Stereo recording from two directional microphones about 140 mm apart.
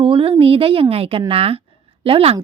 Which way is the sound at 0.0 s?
35° right (ahead or behind).